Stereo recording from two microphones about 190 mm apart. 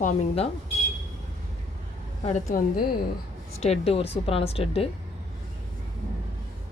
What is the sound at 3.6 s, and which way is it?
Speech, 30° left (ahead or behind).